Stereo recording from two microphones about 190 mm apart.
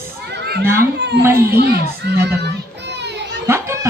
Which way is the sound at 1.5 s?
55° right (ahead or behind).